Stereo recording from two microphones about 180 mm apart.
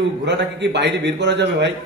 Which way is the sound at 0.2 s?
75° right (ahead or behind).